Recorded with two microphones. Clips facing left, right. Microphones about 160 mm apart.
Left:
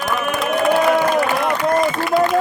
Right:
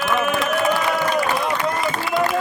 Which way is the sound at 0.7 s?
50° left (ahead or behind).